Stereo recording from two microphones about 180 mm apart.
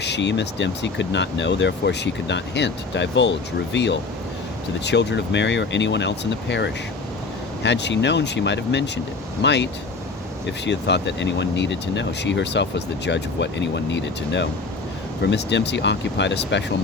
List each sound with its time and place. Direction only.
0.0 s speech: 75° left (ahead or behind)
10.7 s speech: 75° left (ahead or behind)